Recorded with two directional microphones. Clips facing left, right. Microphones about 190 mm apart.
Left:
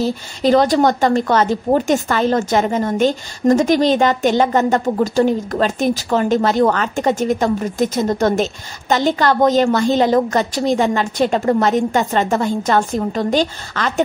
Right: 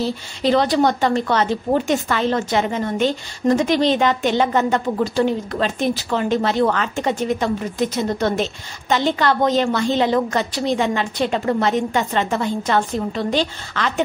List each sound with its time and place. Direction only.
0.0 s speech: 45° left (ahead or behind)